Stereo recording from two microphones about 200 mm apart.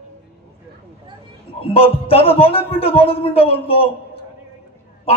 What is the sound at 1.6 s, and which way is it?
A man's voice, 30° left (ahead or behind).